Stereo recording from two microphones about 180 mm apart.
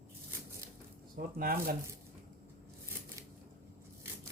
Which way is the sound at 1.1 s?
55° right (ahead or behind).